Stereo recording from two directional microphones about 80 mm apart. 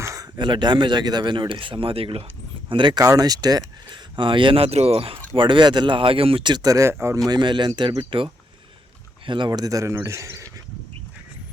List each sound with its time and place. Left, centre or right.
0.0 s a sound: right
0.3 s speech: right
3.0 s speech: right
4.2 s speech: right
6.6 s speech: right
7.3 s speech: right
9.2 s speech: right
9.5 s speech: right